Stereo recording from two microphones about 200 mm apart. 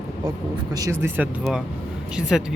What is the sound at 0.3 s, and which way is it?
Speech, 20° right (ahead or behind).